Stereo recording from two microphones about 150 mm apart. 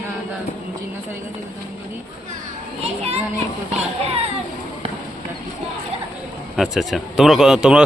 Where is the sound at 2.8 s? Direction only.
45° right (ahead or behind).